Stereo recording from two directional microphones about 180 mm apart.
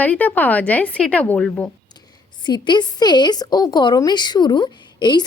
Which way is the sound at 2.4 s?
25° left (ahead or behind).